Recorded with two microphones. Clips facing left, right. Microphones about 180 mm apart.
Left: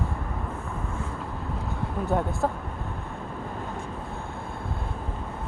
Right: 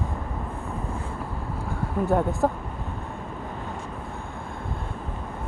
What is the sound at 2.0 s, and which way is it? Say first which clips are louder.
Speech: right 3 dB; 15° right (ahead or behind).